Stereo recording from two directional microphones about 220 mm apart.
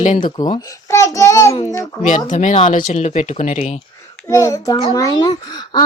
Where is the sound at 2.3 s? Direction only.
35° left (ahead or behind).